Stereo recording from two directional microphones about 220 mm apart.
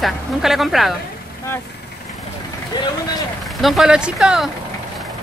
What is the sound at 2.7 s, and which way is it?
Speech, 20° left (ahead or behind).